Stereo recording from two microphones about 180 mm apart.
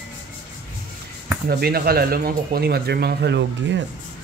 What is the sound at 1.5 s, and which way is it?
Speech, 60° right (ahead or behind).